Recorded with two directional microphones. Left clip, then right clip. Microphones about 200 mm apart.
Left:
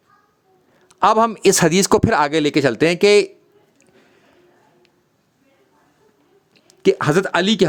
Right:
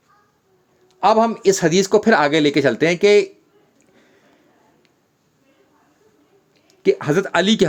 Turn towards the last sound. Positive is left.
turn(degrees=15)  # may be behind; listen again after turning